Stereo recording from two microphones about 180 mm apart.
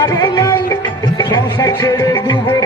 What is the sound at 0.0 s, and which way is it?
Music, 20° left (ahead or behind).